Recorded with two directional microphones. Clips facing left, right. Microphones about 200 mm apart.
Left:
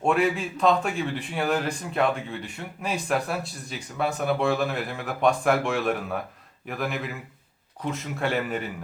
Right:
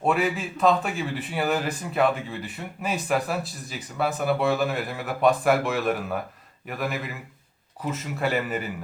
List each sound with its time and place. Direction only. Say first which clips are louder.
0.0 s speech: left 1 dB; centre (ahead or behind)